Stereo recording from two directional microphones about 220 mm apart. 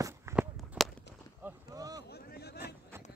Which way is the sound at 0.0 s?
10° right (ahead or behind).